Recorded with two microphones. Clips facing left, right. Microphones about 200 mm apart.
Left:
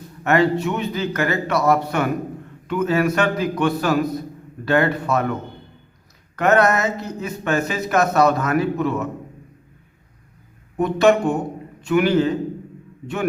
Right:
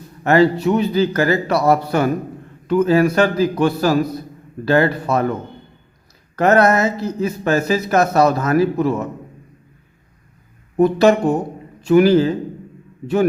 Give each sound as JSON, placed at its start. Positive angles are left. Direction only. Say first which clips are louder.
{"t": 0.3, "sound": "speech", "louder": "right 4 dB", "side_deg": -35}
{"t": 6.3, "sound": "speech", "louder": "right 3 dB", "side_deg": -35}
{"t": 10.8, "sound": "speech", "louder": "right 3 dB", "side_deg": -35}